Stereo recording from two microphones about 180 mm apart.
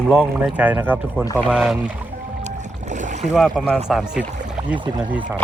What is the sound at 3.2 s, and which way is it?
Speech, centre (ahead or behind).